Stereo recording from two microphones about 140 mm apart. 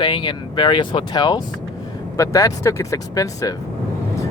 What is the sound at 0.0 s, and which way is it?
Speech, 35° left (ahead or behind).